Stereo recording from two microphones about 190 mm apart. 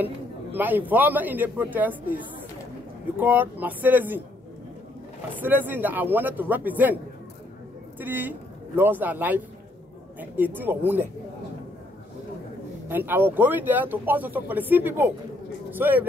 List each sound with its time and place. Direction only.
0.0 s speech: 10° right (ahead or behind)
3.2 s speech: 10° right (ahead or behind)
5.4 s speech: 10° right (ahead or behind)
8.0 s speech: 10° right (ahead or behind)
12.8 s speech: 10° right (ahead or behind)